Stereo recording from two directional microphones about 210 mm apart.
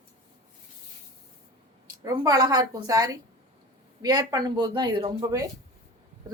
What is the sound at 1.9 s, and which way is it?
A woman's voice, 15° right (ahead or behind).